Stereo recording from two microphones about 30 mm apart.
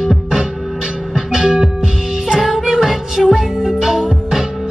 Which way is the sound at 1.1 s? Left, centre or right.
Right.